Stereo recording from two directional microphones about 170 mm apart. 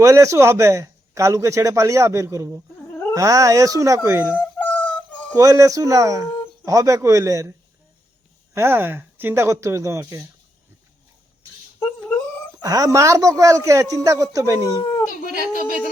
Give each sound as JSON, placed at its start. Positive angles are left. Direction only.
{"t": 0.0, "sound": "a man's voice", "side_deg": -20}
{"t": 2.9, "sound": "a sound", "side_deg": 10}
{"t": 3.2, "sound": "a man's voice", "side_deg": -20}
{"t": 4.3, "sound": "a sound", "side_deg": 10}
{"t": 5.3, "sound": "a man's voice", "side_deg": -20}
{"t": 8.5, "sound": "a man's voice", "side_deg": -15}
{"t": 11.8, "sound": "cat", "side_deg": 10}
{"t": 12.6, "sound": "a man's voice", "side_deg": -20}
{"t": 15.2, "sound": "speech", "side_deg": 55}